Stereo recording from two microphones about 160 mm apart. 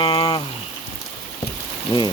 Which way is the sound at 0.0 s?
30° left (ahead or behind).